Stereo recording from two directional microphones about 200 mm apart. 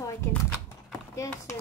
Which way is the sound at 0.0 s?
15° left (ahead or behind).